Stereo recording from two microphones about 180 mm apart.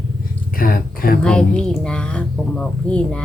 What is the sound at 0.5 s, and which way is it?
Speech, 50° left (ahead or behind).